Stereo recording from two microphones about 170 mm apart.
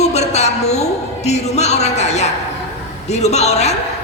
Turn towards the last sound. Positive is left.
turn(degrees=40)  # may be behind; listen again after turning